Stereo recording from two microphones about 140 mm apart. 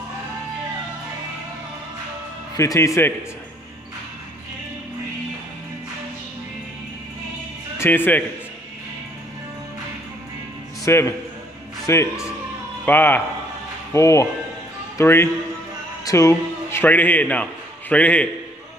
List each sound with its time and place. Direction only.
2.5 s speech: 20° left (ahead or behind)
7.8 s speech: 15° left (ahead or behind)
10.9 s a man's voice: 20° left (ahead or behind)